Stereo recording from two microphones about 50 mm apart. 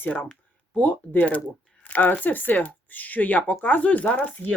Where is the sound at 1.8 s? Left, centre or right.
Left.